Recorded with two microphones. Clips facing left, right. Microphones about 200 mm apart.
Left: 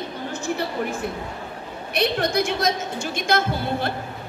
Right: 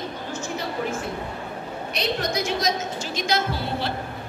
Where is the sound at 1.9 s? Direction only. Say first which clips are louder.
Left 5 dB; 55° left (ahead or behind).